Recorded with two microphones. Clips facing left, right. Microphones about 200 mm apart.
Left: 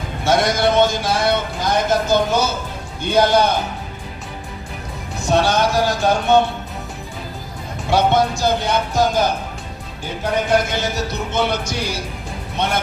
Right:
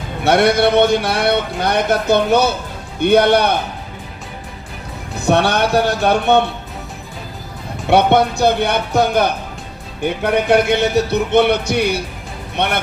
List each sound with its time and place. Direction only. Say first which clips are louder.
0.3 s a man's voice: right 4 dB; 65° right (ahead or behind)
5.2 s a man's voice: right 2 dB; 60° right (ahead or behind)
7.9 s a man's voice: right 3 dB; 60° right (ahead or behind)